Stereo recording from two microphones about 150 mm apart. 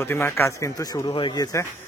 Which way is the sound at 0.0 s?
15° left (ahead or behind).